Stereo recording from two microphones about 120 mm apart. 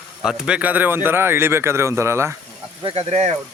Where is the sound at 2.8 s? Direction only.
55° right (ahead or behind).